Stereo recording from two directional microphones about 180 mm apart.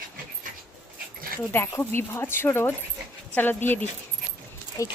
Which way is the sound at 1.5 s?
15° left (ahead or behind).